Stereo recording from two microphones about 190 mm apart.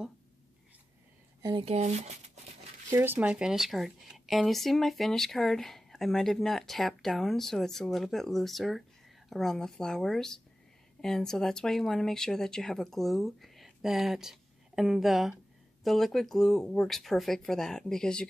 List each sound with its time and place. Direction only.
1.4 s speech: 25° right (ahead or behind)
2.9 s speech: 10° right (ahead or behind)